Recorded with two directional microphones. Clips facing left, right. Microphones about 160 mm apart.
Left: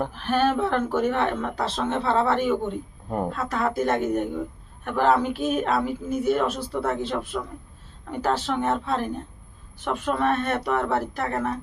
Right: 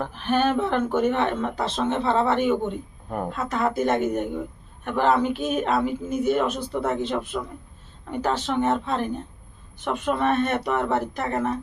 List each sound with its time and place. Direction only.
0.1 s speech: centre (ahead or behind)